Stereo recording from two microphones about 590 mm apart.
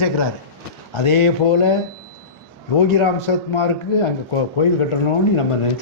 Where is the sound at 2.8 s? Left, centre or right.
Left.